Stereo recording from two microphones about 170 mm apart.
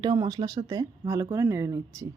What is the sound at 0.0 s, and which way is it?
Speech, 25° right (ahead or behind).